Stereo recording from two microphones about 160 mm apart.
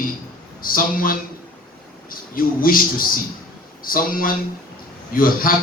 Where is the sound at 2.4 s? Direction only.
60° left (ahead or behind).